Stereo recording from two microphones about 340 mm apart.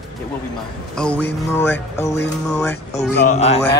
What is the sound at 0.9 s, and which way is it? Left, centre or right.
Speech, centre.